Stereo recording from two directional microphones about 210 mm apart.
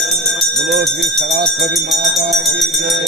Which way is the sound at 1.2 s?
50° right (ahead or behind).